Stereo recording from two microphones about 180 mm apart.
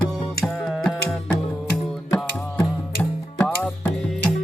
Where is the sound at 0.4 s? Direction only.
5° left (ahead or behind).